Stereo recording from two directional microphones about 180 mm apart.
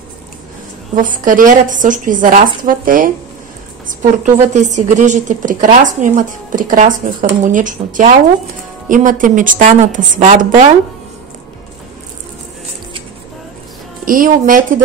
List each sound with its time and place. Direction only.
0.9 s a woman's voice: 50° right (ahead or behind)
14.0 s a woman's voice: 50° right (ahead or behind)